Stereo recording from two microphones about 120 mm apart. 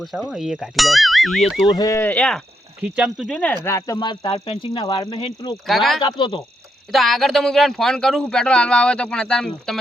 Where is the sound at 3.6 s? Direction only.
25° left (ahead or behind).